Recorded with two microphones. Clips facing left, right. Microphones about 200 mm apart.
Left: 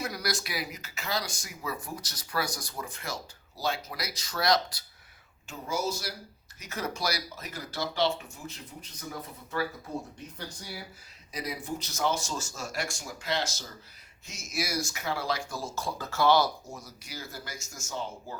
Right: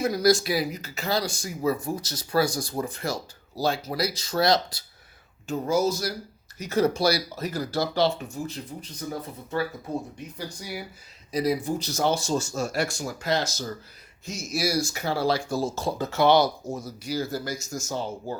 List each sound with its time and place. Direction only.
0.0 s speech: 25° right (ahead or behind)
5.5 s speech: 40° right (ahead or behind)
6.6 s speech: 30° right (ahead or behind)
10.3 s speech: 10° right (ahead or behind)
11.3 s speech: 35° right (ahead or behind)
16.7 s speech: 30° right (ahead or behind)